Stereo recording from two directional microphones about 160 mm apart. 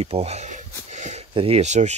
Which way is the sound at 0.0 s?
40° right (ahead or behind).